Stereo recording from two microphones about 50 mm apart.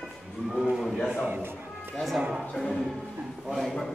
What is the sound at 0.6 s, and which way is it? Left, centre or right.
Speech, centre.